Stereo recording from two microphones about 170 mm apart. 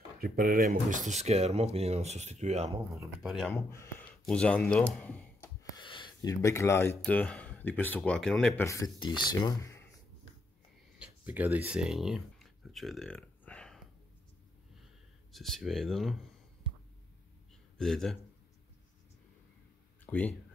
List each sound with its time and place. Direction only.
0.2 s speech: 60° right (ahead or behind); by 2.8 s 40° right (ahead or behind)
3.2 s speech: centre (ahead or behind)
3.5 s speech: 15° left (ahead or behind)
5.6 s speech: 25° left (ahead or behind); by 8.6 s 5° left (ahead or behind)
8.6 s speech: 20° left (ahead or behind)
11.0 s a sound: 10° right (ahead or behind); by 13.7 s 5° left (ahead or behind)
15.3 s speech: centre (ahead or behind)
17.7 s speech: centre (ahead or behind)
20.1 s speech: 10° left (ahead or behind)